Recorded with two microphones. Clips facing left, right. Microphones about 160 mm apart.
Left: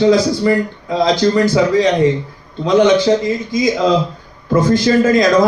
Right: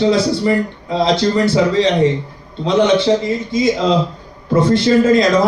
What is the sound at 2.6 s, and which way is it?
Speech, 30° right (ahead or behind).